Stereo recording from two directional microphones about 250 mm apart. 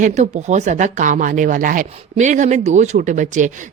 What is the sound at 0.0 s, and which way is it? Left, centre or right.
A woman's voice, right.